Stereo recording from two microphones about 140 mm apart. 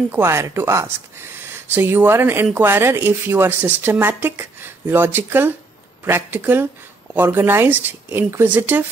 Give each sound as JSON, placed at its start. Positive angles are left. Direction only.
{"t": 0.1, "sound": "speech", "side_deg": -20}